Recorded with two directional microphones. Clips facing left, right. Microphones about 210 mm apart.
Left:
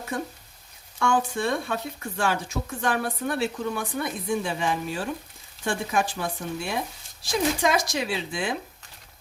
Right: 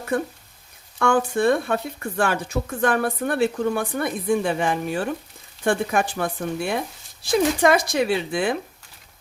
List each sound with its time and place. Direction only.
0.9 s speech: 55° right (ahead or behind)